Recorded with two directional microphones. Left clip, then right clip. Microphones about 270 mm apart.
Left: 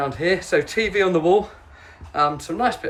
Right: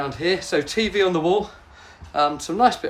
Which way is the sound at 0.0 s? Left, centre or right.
Centre.